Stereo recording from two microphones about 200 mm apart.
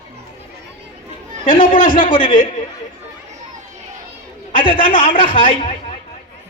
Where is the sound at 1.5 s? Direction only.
45° left (ahead or behind).